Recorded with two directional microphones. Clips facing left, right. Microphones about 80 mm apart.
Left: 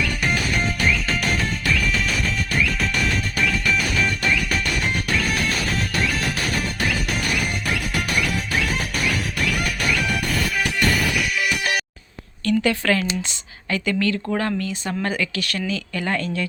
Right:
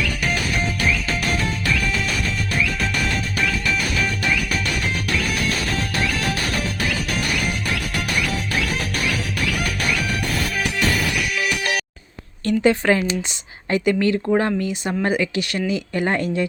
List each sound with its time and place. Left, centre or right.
12.5 s speech: centre